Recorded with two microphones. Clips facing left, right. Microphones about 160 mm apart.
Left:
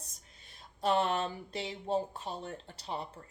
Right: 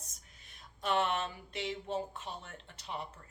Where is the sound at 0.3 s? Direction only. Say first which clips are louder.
Left 6 dB; 30° left (ahead or behind).